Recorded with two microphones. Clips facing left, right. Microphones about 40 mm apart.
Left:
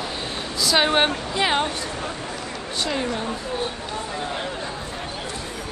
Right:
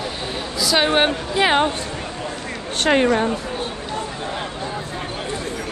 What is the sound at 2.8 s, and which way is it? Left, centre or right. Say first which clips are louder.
Speech: right 10 dB; right.